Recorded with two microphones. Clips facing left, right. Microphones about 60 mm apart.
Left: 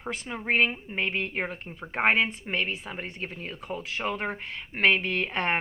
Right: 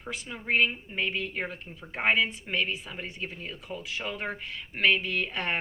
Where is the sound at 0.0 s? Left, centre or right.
Left.